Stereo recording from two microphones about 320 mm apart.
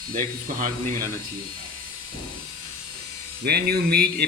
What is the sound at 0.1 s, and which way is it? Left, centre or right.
Speech, right.